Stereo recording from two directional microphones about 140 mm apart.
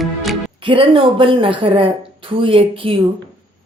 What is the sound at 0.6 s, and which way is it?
Speech, 40° right (ahead or behind).